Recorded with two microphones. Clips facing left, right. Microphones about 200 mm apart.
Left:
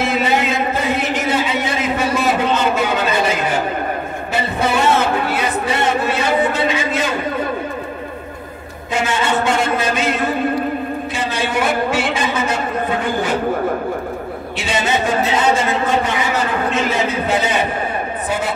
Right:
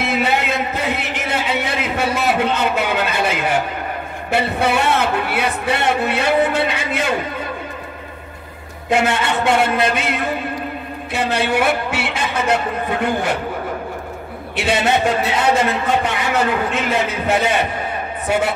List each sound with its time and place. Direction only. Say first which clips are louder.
0.0 s chant: left 1 dB; 60° right (ahead or behind)
1.2 s a sound: left 3 dB; 65° right (ahead or behind)
8.9 s a man's voice: right 1 dB; 65° right (ahead or behind)
11.1 s a man's voice: right 4 dB; 65° right (ahead or behind)
14.6 s speech: right 3 dB; 65° right (ahead or behind)